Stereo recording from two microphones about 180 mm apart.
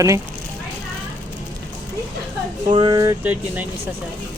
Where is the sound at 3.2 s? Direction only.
10° right (ahead or behind).